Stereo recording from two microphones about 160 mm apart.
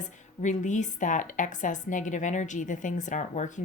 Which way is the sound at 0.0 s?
50° left (ahead or behind).